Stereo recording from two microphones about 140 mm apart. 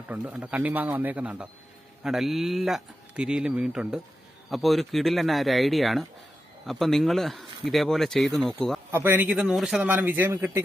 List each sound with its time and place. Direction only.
0.1 s a man's voice: 10° right (ahead or behind)
8.9 s a man's voice: 15° right (ahead or behind)